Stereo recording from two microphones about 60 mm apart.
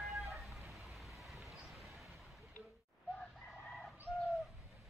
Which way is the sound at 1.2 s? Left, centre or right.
Centre.